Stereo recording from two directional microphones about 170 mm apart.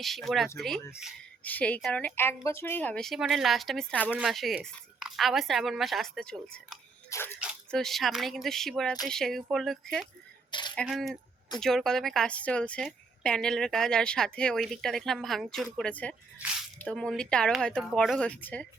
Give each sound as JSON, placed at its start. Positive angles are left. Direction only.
{"t": 0.0, "sound": "a woman's voice", "side_deg": 0}
{"t": 1.5, "sound": "a woman's voice", "side_deg": 10}
{"t": 7.7, "sound": "a woman's voice", "side_deg": 0}
{"t": 10.5, "sound": "speech", "side_deg": 25}
{"t": 10.8, "sound": "a woman's voice", "side_deg": 0}